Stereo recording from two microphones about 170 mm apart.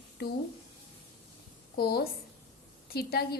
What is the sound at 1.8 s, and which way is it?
A woman's voice, 65° left (ahead or behind).